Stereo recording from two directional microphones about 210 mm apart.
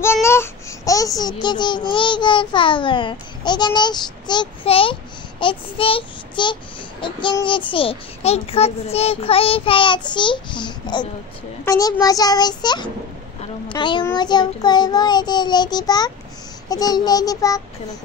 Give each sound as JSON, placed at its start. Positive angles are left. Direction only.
{"t": 0.0, "sound": "child singing", "side_deg": 10}
{"t": 11.6, "sound": "a child's voice", "side_deg": 15}
{"t": 13.7, "sound": "child singing", "side_deg": 20}
{"t": 16.6, "sound": "a child's voice", "side_deg": 15}